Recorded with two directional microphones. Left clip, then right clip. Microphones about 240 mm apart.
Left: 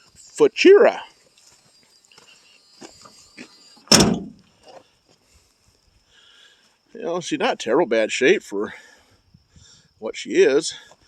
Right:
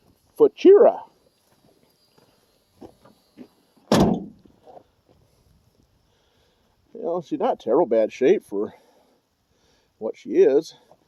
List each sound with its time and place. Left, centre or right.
0.3 s speech: centre
3.3 s door: left
4.6 s a sound: left
6.1 s sniff: centre
6.9 s speech: centre
8.6 s a sound: centre
9.6 s speech: centre